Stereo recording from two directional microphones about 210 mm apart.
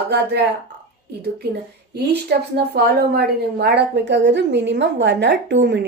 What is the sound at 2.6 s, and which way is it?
A woman's voice, 50° right (ahead or behind).